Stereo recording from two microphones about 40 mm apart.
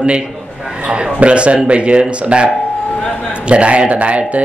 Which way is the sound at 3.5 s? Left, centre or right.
Right.